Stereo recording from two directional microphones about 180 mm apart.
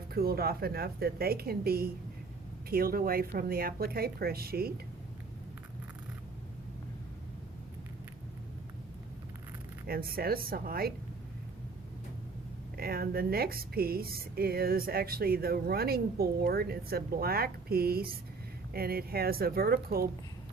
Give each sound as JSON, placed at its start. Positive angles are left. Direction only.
{"t": 0.1, "sound": "speech", "side_deg": -60}
{"t": 9.8, "sound": "speech", "side_deg": -55}
{"t": 12.7, "sound": "speech", "side_deg": -55}